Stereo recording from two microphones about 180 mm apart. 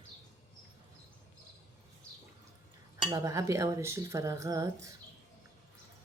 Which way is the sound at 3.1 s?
20° right (ahead or behind).